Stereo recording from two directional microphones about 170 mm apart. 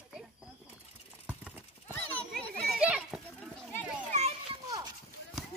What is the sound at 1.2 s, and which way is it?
Clip-clop, 10° right (ahead or behind).